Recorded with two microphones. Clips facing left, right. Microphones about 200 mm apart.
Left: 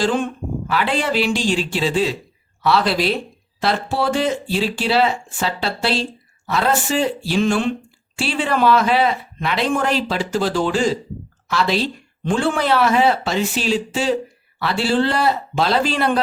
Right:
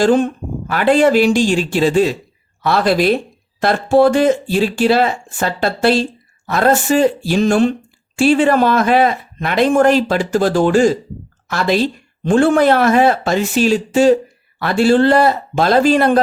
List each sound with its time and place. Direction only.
0.0 s speech: 40° right (ahead or behind)